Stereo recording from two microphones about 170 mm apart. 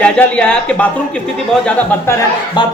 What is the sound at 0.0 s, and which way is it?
Speech, 5° left (ahead or behind).